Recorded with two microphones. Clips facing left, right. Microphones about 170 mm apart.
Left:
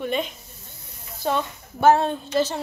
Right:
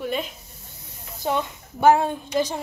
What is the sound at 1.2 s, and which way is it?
A woman's voice, 15° right (ahead or behind).